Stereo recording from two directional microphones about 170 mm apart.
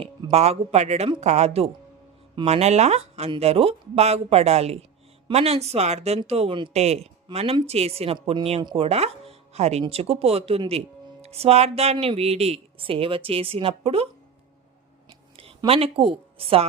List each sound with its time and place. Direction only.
0.0 s speech: 35° right (ahead or behind)
15.4 s a woman's voice: 35° right (ahead or behind)